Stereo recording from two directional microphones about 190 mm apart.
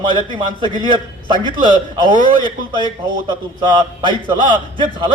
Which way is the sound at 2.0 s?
25° right (ahead or behind).